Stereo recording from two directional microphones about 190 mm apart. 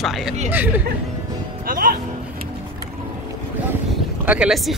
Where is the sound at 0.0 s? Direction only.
Centre (ahead or behind).